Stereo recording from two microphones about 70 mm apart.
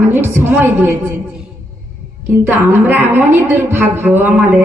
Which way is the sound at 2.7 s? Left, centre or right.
Right.